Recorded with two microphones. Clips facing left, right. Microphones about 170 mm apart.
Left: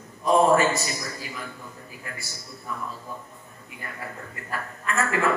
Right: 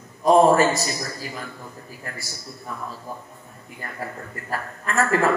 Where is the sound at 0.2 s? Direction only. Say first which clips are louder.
Right 4 dB; 40° right (ahead or behind).